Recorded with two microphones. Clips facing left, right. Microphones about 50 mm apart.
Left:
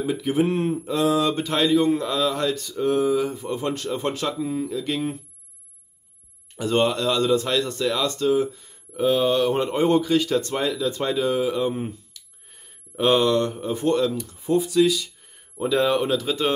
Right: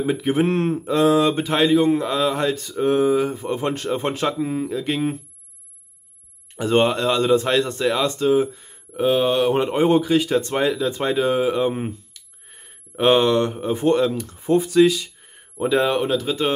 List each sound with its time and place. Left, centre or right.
0.0 s speech: right
1.1 s speech: right
1.4 s speech: right
6.5 s speech: right
10.5 s speech: right
14.1 s speech: right
15.0 s speech: right; by 16.5 s centre